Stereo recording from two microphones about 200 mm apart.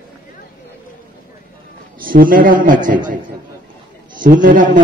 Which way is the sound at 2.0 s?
45° right (ahead or behind).